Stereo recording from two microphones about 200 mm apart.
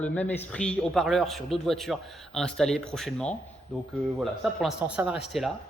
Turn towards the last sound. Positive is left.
turn(degrees=-5)  # may be behind; listen again after turning